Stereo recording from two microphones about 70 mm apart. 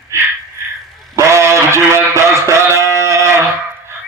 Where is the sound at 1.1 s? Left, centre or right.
Right.